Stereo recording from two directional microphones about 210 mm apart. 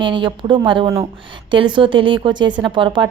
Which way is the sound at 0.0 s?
20° right (ahead or behind).